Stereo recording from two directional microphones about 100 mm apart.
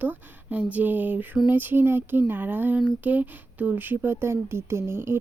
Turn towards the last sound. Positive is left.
turn(degrees=-25)  # may be behind; listen again after turning